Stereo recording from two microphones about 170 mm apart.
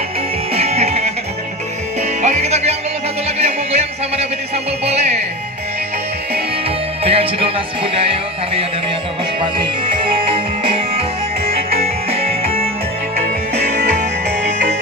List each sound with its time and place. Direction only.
0.5 s music: 40° right (ahead or behind)
2.2 s music: 40° right (ahead or behind)
7.0 s music: 35° right (ahead or behind)
13.7 s music: 45° right (ahead or behind)